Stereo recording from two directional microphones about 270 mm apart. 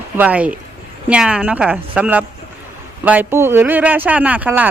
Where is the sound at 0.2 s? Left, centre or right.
Centre.